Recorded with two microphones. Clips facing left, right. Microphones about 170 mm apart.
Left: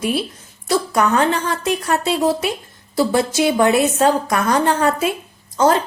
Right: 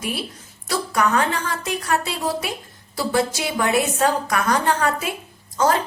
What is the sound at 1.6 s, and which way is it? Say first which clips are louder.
A woman's voice: left 5 dB; 25° left (ahead or behind).